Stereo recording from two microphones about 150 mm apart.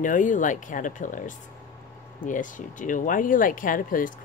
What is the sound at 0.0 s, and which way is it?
Speech, 60° left (ahead or behind).